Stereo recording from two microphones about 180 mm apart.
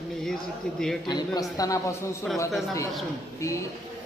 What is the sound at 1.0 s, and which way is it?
Speech, 20° left (ahead or behind).